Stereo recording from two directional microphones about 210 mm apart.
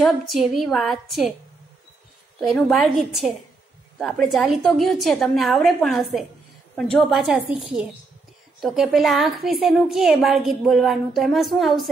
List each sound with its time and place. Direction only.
0.0 s a woman's voice: centre (ahead or behind)
2.4 s a woman's voice: centre (ahead or behind)
8.5 s a woman's voice: centre (ahead or behind)